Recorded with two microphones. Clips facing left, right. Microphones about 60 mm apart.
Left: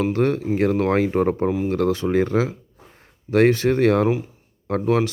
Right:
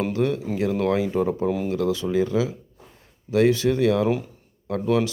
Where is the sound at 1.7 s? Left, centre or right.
Left.